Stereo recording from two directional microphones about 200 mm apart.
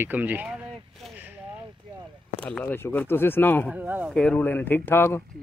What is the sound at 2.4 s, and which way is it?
Speech, 10° left (ahead or behind).